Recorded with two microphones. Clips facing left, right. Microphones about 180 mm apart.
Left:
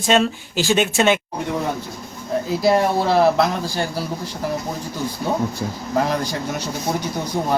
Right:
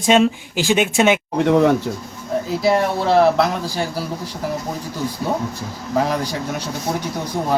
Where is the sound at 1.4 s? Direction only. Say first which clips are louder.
Right 9 dB; 80° right.